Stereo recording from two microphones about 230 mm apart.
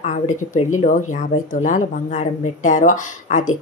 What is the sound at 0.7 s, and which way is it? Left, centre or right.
Speech, left.